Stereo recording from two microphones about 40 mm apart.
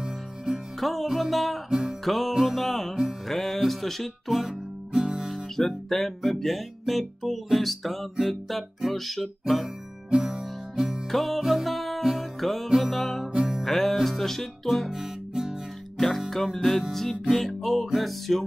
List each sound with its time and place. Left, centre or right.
0.7 s music: centre
4.5 s guitar: centre
5.3 s music: centre
10.1 s music: centre
11.1 s music: centre
12.4 s music: centre
12.6 s music: centre
12.9 s music: centre
14.9 s music: centre
16.3 s music: centre